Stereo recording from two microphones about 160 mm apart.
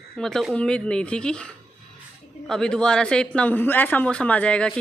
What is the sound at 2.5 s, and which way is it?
Speech, 5° left (ahead or behind).